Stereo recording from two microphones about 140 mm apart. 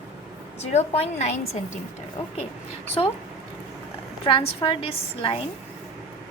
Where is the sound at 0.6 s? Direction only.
50° left (ahead or behind).